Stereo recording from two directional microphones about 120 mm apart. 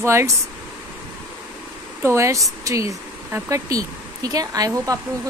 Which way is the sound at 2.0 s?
25° right (ahead or behind).